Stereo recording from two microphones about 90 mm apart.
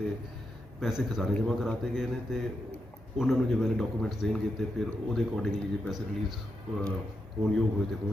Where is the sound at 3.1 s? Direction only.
5° right (ahead or behind).